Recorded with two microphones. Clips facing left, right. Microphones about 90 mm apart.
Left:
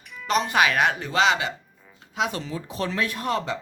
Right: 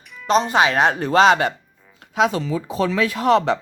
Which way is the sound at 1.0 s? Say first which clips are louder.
Right 7 dB; 45° right (ahead or behind).